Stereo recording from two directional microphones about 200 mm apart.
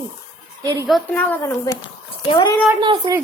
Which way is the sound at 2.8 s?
20° right (ahead or behind).